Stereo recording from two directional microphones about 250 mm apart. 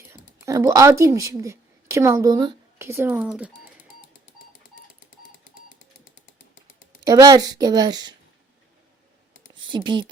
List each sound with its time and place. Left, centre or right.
0.1 s speech: centre
7.0 s speech: centre
9.7 s speech: centre